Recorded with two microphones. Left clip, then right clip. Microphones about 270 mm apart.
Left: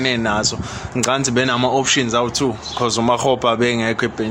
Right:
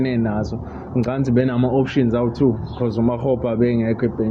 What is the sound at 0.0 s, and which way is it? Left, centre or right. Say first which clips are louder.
A man's voice: left 5 dB; left.